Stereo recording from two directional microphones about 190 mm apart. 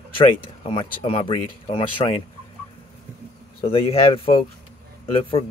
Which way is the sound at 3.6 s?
30° left (ahead or behind).